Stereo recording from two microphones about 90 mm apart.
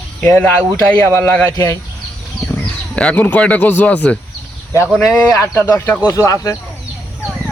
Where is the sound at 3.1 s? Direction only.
20° left (ahead or behind).